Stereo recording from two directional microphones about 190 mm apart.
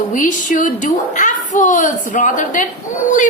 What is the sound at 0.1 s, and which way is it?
A woman's voice, 45° left (ahead or behind).